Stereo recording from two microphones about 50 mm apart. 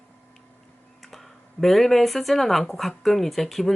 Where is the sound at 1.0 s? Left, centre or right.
Centre.